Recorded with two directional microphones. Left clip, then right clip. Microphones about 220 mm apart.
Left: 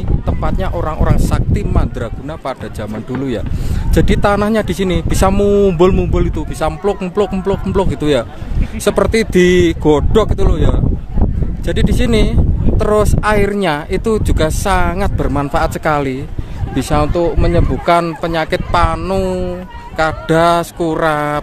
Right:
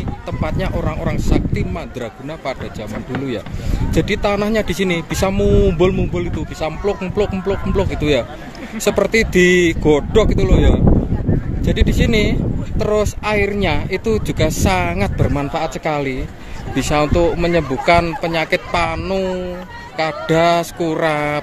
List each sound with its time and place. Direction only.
0.4 s speech: 15° left (ahead or behind)
3.9 s speech: 25° left (ahead or behind)
16.7 s speech: 15° left (ahead or behind)